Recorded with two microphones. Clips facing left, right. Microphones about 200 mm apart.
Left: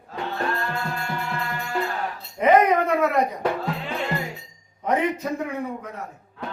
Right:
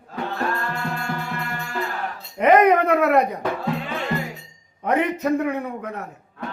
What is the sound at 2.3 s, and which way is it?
Speech, 60° right (ahead or behind).